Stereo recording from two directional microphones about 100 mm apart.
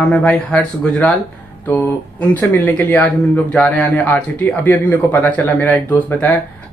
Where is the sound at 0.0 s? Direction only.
10° left (ahead or behind).